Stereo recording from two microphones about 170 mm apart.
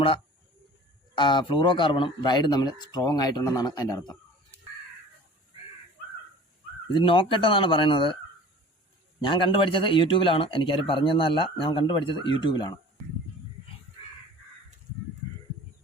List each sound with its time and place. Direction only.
1.1 s speech: 25° left (ahead or behind)
6.9 s speech: 30° left (ahead or behind)
9.2 s speech: 30° left (ahead or behind)